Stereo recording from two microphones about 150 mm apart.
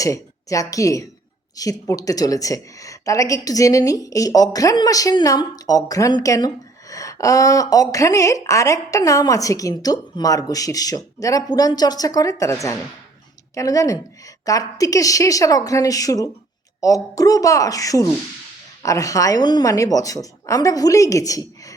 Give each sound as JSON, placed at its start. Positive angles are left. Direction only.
{"t": 0.0, "sound": "a woman's voice", "side_deg": 20}